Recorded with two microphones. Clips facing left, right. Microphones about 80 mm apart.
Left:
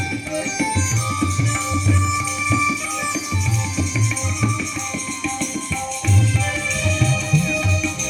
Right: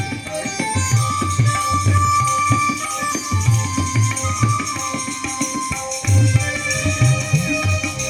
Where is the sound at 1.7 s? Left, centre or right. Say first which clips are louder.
Right 6 dB; right.